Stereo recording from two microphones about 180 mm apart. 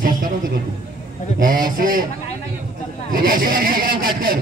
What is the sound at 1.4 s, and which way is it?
Speech, 50° right (ahead or behind).